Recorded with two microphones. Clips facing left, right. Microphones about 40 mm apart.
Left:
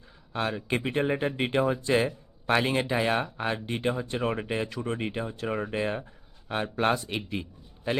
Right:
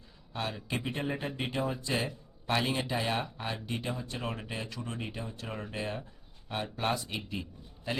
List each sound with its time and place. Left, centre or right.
0.3 s speech: left